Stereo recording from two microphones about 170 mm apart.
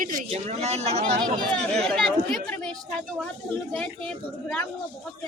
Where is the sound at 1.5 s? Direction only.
5° left (ahead or behind).